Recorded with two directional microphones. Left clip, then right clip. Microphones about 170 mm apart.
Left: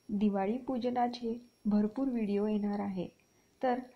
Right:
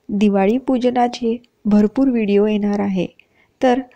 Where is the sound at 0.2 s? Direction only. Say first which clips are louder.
Right 17 dB; 45° right (ahead or behind).